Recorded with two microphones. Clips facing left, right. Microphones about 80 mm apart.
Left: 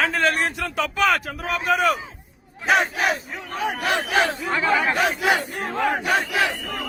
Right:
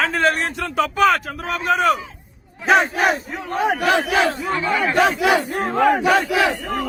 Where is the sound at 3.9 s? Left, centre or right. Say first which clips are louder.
Right 3 dB; right.